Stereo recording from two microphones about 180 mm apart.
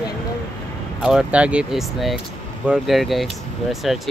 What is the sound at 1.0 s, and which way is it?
Speech, 5° right (ahead or behind).